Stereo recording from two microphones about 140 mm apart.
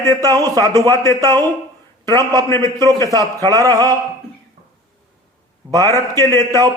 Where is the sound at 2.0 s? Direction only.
30° right (ahead or behind).